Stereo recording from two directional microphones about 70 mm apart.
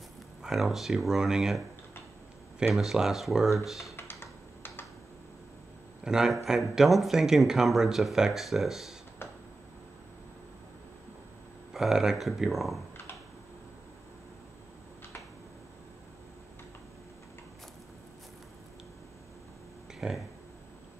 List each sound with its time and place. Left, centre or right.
0.4 s speech: centre
2.7 s speech: centre
3.9 s computer keyboard: left
6.0 s speech: centre
9.2 s a sound: left
11.7 s speech: centre
20.0 s speech: centre